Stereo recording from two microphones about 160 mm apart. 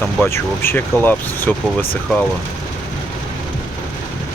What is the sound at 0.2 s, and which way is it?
Speech, 15° left (ahead or behind).